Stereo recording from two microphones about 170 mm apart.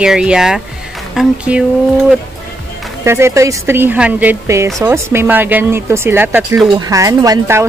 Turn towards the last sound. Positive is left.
turn(degrees=-20)  # may be behind; listen again after turning